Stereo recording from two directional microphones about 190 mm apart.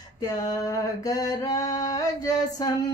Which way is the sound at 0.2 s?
20° left (ahead or behind).